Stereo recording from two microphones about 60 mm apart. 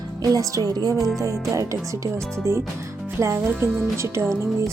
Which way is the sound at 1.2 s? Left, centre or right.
Right.